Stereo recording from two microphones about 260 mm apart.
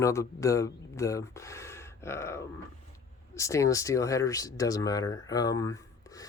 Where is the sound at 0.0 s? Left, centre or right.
Centre.